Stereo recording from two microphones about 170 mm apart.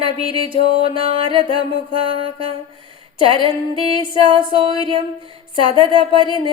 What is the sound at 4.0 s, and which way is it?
Music, 30° right (ahead or behind).